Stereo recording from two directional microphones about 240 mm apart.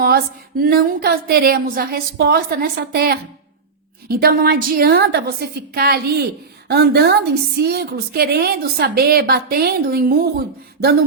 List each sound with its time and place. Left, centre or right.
0.0 s a woman's voice: right